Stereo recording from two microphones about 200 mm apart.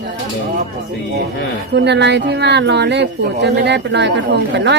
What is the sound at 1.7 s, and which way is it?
Speech, 60° right (ahead or behind).